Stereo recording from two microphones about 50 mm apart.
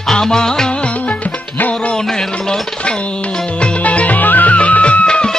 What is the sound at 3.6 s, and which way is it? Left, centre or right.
Music, left.